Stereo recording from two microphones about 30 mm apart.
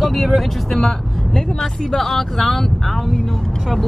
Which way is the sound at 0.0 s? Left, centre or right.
Centre.